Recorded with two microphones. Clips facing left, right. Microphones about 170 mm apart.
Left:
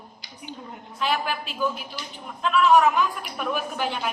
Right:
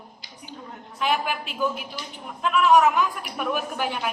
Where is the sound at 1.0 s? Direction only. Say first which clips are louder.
Right 1 dB; 15° right (ahead or behind).